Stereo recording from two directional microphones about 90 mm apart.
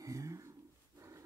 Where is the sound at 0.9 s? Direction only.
35° right (ahead or behind).